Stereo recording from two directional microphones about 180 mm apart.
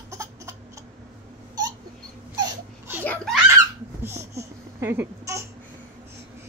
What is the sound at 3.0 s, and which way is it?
Giggle, 10° left (ahead or behind).